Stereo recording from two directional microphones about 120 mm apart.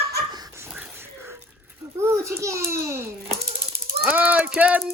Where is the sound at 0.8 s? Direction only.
20° right (ahead or behind).